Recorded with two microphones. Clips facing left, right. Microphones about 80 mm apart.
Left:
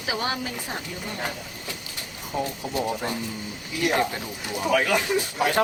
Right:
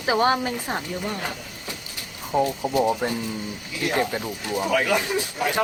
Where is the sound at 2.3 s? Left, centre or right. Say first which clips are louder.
Right 6 dB; right.